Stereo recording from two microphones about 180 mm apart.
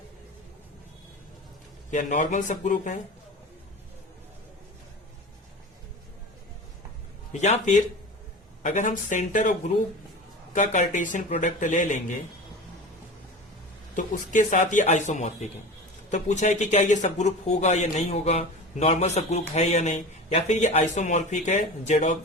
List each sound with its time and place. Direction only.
1.9 s speech: 45° left (ahead or behind)
7.4 s speech: 40° left (ahead or behind)
10.5 s speech: 45° left (ahead or behind)
13.9 s speech: 45° left (ahead or behind)